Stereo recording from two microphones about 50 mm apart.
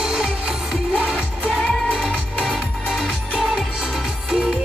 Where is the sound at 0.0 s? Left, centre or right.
Centre.